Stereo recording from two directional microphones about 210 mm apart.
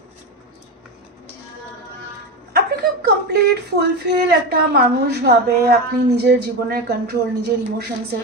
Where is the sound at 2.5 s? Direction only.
50° right (ahead or behind).